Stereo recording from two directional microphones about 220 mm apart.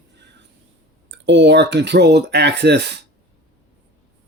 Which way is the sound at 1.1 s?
55° right (ahead or behind).